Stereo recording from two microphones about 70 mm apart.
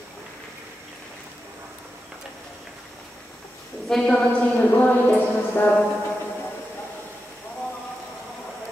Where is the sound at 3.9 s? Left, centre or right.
Centre.